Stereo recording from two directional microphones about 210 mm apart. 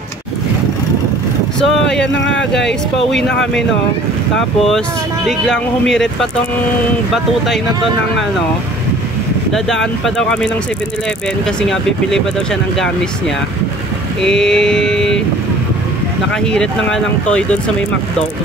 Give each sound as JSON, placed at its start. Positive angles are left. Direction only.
{"t": 1.6, "sound": "speech", "side_deg": 5}
{"t": 2.1, "sound": "speech", "side_deg": 60}
{"t": 4.6, "sound": "speech", "side_deg": 0}
{"t": 9.5, "sound": "speech", "side_deg": 0}
{"t": 11.6, "sound": "speech", "side_deg": 0}
{"t": 14.2, "sound": "speech", "side_deg": 5}
{"t": 16.5, "sound": "speech", "side_deg": 5}